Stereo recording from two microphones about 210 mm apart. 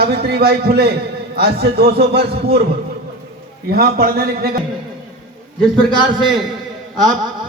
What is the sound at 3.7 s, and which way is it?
Speech, 45° right (ahead or behind).